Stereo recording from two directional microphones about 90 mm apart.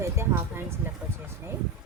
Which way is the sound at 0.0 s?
30° right (ahead or behind).